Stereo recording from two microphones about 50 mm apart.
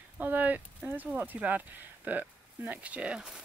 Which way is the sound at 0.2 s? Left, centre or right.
Right.